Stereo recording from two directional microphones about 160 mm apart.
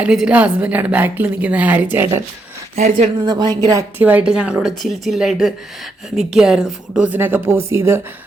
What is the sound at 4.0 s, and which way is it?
A woman's voice, 10° right (ahead or behind).